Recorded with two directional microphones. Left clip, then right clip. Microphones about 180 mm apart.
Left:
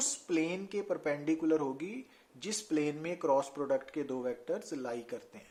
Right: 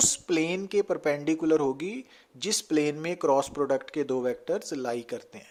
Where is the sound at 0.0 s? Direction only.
45° right (ahead or behind).